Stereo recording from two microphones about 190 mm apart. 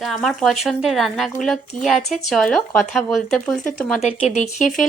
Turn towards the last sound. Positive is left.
turn(degrees=40)  # may be behind; listen again after turning